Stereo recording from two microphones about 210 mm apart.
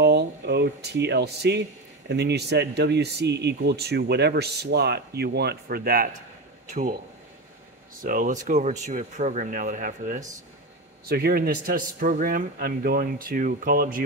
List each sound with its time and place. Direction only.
0.0 s speech: 50° right (ahead or behind)
8.0 s speech: 40° right (ahead or behind)